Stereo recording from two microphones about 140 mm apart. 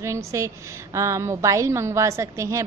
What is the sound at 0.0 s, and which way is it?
A woman's voice, 20° right (ahead or behind).